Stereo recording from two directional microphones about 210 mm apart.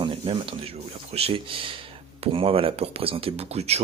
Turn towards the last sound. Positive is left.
turn(degrees=-30)  # may be behind; listen again after turning